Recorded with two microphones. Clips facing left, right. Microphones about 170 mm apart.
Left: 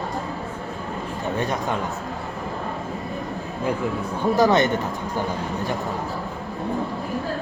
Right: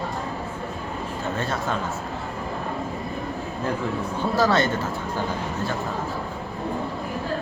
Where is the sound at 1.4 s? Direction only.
15° left (ahead or behind).